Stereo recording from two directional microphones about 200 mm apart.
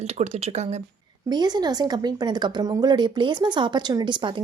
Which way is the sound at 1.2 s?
20° right (ahead or behind).